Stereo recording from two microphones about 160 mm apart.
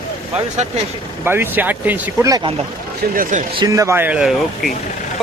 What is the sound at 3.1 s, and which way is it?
Speech, 60° right (ahead or behind).